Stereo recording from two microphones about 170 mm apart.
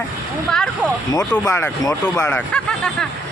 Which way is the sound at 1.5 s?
15° left (ahead or behind).